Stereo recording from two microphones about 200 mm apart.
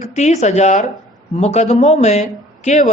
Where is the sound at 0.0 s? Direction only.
35° left (ahead or behind).